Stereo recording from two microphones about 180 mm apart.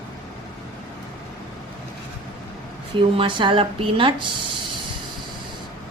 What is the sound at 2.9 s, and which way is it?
Speech, 30° right (ahead or behind).